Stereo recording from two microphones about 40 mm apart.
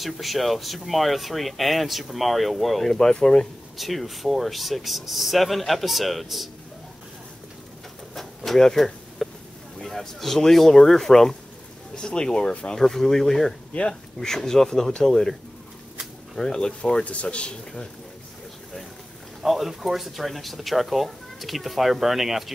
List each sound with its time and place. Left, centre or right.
0.0 s speech: centre
2.9 s speech: centre
3.7 s speech: centre
8.1 s a sound: centre
9.8 s speech: centre
11.9 s speech: centre
12.8 s speech: centre
16.3 s speech: centre
17.0 s speech: left
19.4 s speech: centre